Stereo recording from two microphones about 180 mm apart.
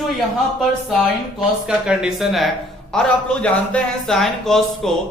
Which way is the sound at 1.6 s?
5° right (ahead or behind).